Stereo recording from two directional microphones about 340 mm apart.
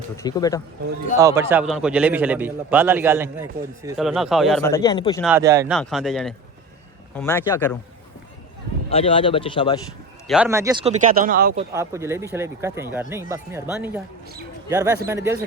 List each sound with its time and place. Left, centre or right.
0.2 s speech: centre
1.2 s a man's voice: centre
5.2 s a man's voice: centre
8.9 s speech: centre
10.2 s speech: centre; by 11.6 s right
11.7 s speech: centre